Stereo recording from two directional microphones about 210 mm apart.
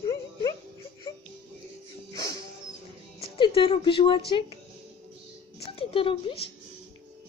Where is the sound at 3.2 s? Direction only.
25° left (ahead or behind).